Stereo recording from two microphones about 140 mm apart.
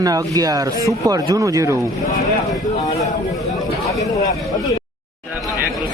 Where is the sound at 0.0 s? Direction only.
25° right (ahead or behind).